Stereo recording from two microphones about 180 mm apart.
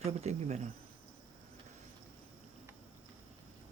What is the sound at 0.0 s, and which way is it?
Speech, 40° right (ahead or behind).